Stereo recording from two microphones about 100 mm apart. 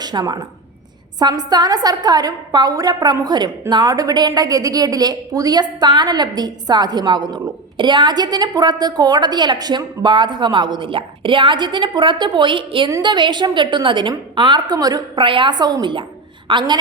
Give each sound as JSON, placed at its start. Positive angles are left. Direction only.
{"t": 0.0, "sound": "a woman's voice", "side_deg": -45}